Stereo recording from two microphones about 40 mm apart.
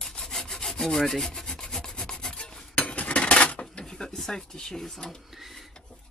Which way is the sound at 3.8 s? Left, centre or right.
Centre.